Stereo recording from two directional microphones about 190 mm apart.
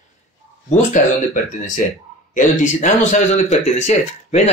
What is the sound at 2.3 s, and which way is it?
Speech, 40° left (ahead or behind).